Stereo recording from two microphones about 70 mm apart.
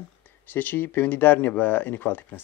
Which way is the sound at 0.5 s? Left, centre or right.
Left.